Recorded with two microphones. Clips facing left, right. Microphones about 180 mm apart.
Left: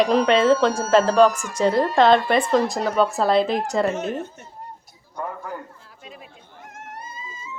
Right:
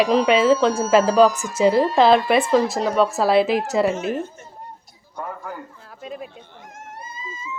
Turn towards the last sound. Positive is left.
turn(degrees=-50)  # may be behind; listen again after turning